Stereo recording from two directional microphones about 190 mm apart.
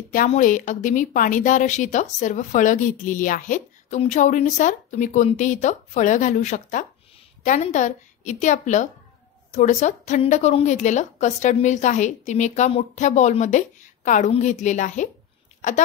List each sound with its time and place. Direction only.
0.1 s a woman's voice: 45° left (ahead or behind)